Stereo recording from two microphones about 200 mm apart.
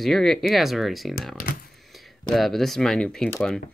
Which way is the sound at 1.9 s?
Centre (ahead or behind).